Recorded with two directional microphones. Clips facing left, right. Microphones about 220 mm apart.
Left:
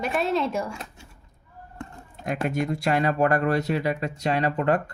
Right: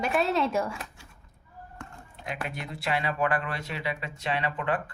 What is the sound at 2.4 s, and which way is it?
Speech, 45° left (ahead or behind).